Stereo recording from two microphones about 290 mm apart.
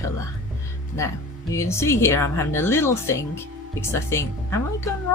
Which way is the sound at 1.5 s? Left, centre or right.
Centre.